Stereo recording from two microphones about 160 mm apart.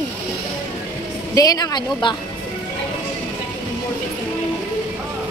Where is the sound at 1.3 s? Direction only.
25° left (ahead or behind).